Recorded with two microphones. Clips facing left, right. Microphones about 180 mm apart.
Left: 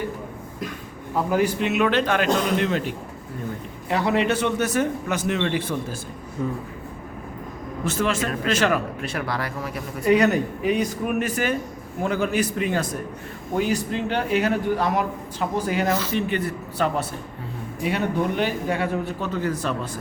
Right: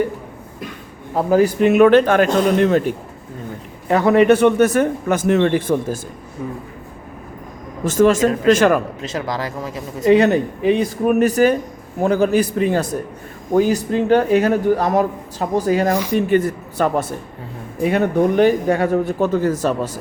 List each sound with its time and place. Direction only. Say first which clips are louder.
1.1 s a man's voice: right 6 dB; 35° right (ahead or behind)
6.4 s speech: left 1 dB; 10° right (ahead or behind)
7.9 s a man's voice: right 10 dB; 45° right (ahead or behind)
9.1 s a man's voice: right 5 dB; 20° right (ahead or behind)
11.0 s a man's voice: right 10 dB; 40° right (ahead or behind)